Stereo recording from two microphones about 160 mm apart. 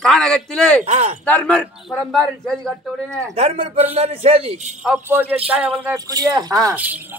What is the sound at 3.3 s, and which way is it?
A man's voice, 40° right (ahead or behind).